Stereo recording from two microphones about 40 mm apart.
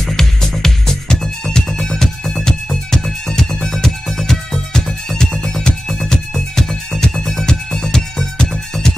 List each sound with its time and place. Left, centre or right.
0.0 s music: centre